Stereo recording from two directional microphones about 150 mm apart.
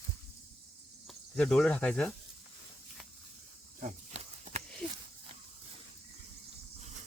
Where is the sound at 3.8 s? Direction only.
50° right (ahead or behind).